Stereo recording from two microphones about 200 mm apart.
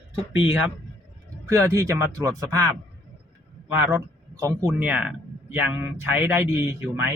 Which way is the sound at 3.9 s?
15° right (ahead or behind).